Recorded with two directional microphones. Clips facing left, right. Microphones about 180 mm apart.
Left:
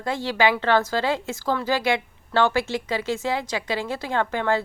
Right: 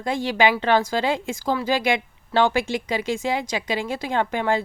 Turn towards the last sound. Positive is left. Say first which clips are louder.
# right 1 dB
turn(degrees=-15)  # may be behind; listen again after turning